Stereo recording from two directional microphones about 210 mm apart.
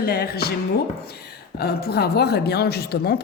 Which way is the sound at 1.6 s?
50° left (ahead or behind).